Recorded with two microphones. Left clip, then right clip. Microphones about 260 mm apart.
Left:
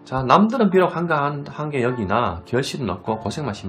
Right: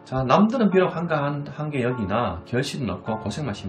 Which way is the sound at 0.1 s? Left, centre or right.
Centre.